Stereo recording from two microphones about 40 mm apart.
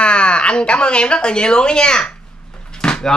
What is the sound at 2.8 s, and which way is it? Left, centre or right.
Vehicle, left.